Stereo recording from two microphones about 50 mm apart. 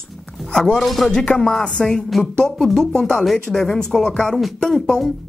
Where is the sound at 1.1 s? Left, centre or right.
Centre.